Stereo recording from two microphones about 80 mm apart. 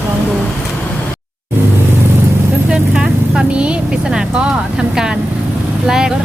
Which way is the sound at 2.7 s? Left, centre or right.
Centre.